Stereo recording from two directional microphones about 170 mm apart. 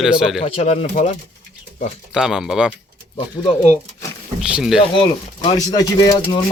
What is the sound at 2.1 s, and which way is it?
Speech, 5° right (ahead or behind).